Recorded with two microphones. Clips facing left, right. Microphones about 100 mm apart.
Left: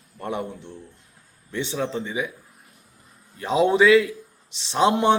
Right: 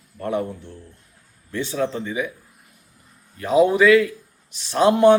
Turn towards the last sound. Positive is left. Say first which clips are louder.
# right 4 dB
turn(degrees=20)  # may be behind; listen again after turning